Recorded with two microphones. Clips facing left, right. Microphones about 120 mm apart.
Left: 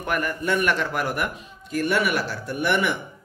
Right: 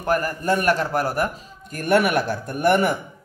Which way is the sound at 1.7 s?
50° right (ahead or behind).